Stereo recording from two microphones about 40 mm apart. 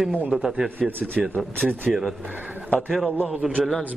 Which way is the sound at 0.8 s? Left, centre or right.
Right.